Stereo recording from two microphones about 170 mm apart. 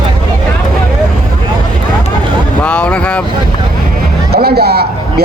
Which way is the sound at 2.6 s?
5° left (ahead or behind).